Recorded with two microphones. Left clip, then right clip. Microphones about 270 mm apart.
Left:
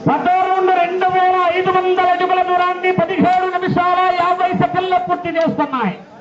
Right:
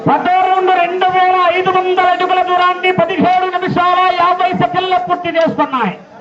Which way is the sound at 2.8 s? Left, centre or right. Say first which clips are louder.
Right 3 dB; centre.